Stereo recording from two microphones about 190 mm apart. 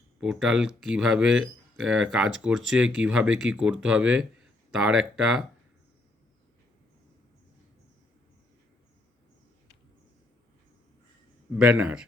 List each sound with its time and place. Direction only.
0.2 s speech: 5° right (ahead or behind)
11.5 s speech: 5° right (ahead or behind)